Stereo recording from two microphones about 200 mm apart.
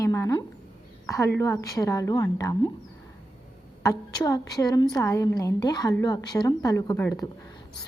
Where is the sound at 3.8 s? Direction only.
15° left (ahead or behind).